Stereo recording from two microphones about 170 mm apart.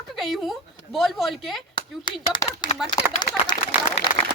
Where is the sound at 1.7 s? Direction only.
25° left (ahead or behind).